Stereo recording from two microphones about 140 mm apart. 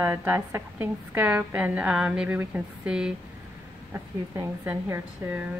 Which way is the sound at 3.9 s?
20° right (ahead or behind).